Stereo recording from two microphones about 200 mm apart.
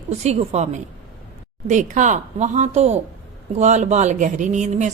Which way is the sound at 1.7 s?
35° right (ahead or behind).